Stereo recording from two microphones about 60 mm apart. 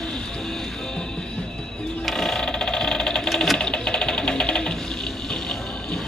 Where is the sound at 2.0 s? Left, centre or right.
Centre.